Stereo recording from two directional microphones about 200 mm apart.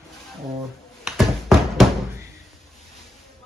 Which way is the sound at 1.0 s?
Centre (ahead or behind).